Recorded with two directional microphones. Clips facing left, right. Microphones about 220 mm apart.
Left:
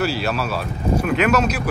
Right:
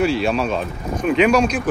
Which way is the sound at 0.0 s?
5° left (ahead or behind).